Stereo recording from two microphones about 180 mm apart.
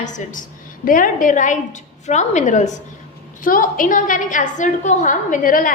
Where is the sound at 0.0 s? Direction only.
45° left (ahead or behind).